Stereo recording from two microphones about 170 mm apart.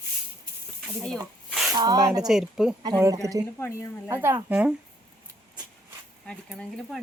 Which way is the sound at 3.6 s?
15° left (ahead or behind).